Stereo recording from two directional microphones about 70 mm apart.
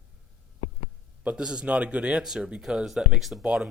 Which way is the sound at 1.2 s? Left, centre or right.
Centre.